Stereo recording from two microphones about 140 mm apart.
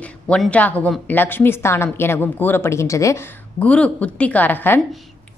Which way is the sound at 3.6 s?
10° left (ahead or behind).